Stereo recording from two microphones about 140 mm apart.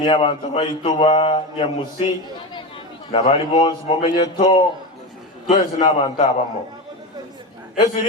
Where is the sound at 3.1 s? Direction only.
40° left (ahead or behind).